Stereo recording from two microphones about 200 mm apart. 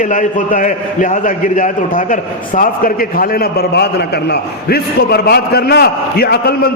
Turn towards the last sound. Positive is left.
turn(degrees=50)  # may be behind; listen again after turning